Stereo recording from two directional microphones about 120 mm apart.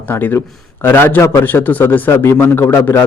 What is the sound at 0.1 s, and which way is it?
Speech, 15° left (ahead or behind).